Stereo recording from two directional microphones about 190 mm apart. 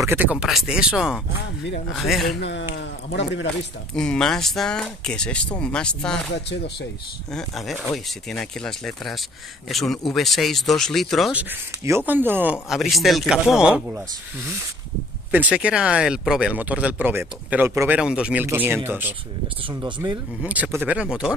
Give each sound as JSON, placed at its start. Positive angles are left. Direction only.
{"t": 0.0, "sound": "speech", "side_deg": -10}
{"t": 2.4, "sound": "speech", "side_deg": 60}
{"t": 3.9, "sound": "speech", "side_deg": 5}
{"t": 7.3, "sound": "speech", "side_deg": 0}
{"t": 12.1, "sound": "speech", "side_deg": -10}
{"t": 15.3, "sound": "speech", "side_deg": -5}
{"t": 20.4, "sound": "speech", "side_deg": -5}